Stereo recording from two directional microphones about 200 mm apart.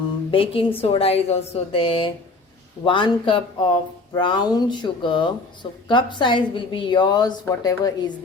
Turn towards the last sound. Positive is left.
turn(degrees=20)  # may be behind; listen again after turning